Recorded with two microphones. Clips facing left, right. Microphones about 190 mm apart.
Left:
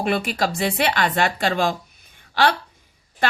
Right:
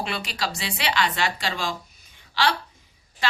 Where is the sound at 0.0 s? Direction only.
50° left (ahead or behind).